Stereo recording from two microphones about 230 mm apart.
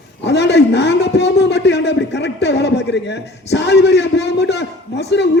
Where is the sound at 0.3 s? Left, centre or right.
Left.